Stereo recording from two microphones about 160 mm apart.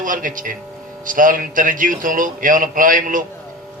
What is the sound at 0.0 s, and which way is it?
A man's voice, 55° right (ahead or behind).